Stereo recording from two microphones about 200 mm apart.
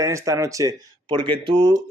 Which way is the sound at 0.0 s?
15° right (ahead or behind).